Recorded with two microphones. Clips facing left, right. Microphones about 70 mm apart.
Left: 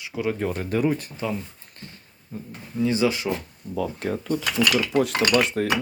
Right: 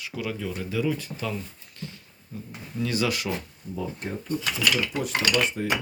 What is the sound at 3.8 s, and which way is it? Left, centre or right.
Speech, left.